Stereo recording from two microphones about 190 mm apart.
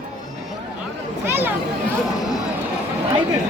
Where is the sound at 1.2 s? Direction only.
10° right (ahead or behind).